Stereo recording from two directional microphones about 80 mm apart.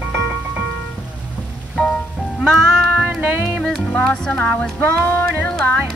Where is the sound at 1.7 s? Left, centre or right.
Centre.